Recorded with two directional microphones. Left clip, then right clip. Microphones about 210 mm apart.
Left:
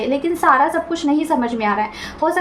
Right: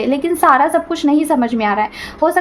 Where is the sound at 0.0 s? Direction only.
40° right (ahead or behind).